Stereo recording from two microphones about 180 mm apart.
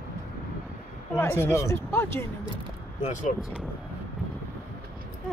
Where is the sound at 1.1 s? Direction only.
15° left (ahead or behind).